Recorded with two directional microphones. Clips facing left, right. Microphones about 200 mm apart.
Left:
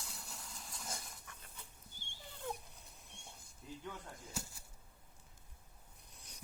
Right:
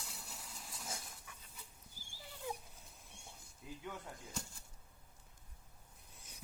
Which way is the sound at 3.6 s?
5° right (ahead or behind).